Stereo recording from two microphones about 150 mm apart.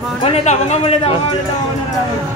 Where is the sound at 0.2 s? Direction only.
45° left (ahead or behind).